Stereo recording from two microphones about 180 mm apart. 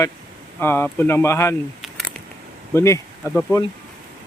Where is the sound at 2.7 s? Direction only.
15° left (ahead or behind).